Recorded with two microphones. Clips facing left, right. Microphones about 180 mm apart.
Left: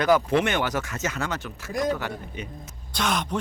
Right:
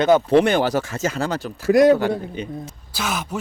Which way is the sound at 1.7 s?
75° right (ahead or behind).